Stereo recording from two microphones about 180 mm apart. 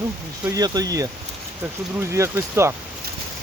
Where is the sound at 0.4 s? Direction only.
20° right (ahead or behind).